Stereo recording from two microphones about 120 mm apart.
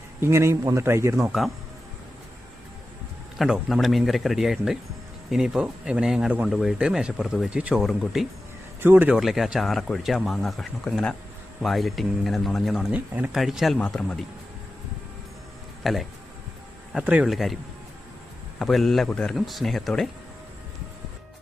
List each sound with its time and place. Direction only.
0.2 s a man's voice: 20° right (ahead or behind)
1.2 s speech: centre (ahead or behind)
3.3 s speech: centre (ahead or behind)
8.8 s a man's voice: 15° right (ahead or behind)
9.1 s speech: centre (ahead or behind)
15.8 s speech: centre (ahead or behind)
16.9 s a man's voice: 10° right (ahead or behind)
17.2 s speech: centre (ahead or behind)
18.6 s speech: centre (ahead or behind)